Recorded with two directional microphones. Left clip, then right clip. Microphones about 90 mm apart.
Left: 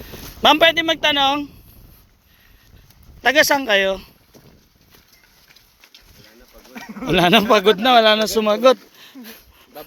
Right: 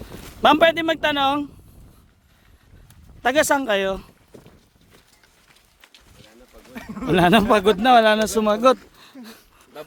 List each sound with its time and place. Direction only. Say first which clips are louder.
0.4 s speech: left 2 dB; 40° right (ahead or behind)
3.2 s speech: left 3 dB; 35° right (ahead or behind)
6.7 s a sound: left 1 dB; 5° left (ahead or behind)
7.1 s speech: left 2 dB; 35° right (ahead or behind)